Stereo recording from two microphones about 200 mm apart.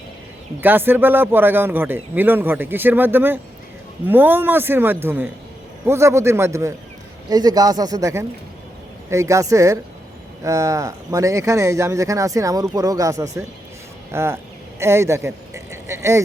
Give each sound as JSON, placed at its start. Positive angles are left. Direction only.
{"t": 0.6, "sound": "speech", "side_deg": -10}